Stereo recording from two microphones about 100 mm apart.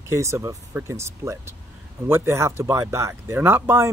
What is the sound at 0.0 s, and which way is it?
Speech, 30° right (ahead or behind).